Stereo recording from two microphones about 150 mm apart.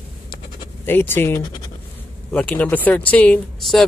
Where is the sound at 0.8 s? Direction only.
15° left (ahead or behind).